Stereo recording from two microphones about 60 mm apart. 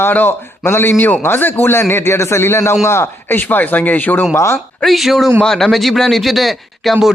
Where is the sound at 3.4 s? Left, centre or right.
Left.